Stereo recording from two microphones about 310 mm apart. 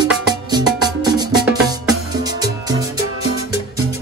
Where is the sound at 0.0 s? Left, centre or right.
Centre.